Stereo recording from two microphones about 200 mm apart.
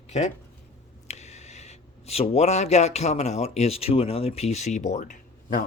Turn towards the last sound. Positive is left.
turn(degrees=40)  # may be behind; listen again after turning